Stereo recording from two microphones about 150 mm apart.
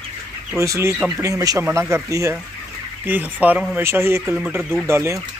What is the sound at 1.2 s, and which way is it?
Speech, 20° right (ahead or behind).